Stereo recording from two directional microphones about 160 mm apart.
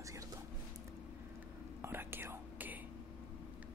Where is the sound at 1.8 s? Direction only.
15° right (ahead or behind).